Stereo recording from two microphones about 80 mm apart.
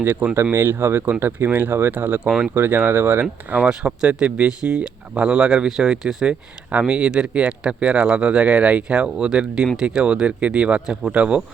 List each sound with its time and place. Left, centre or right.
0.0 s speech: right; by 6.3 s centre
6.7 s speech: centre